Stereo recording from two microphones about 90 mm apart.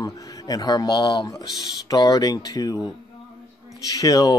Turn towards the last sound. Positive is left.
turn(degrees=40)  # may be behind; listen again after turning